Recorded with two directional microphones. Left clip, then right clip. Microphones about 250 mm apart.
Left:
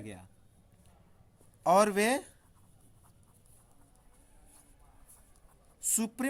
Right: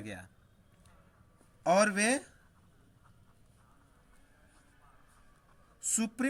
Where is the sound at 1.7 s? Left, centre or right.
Centre.